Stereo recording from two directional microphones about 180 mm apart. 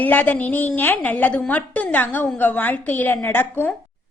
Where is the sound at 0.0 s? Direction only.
10° left (ahead or behind).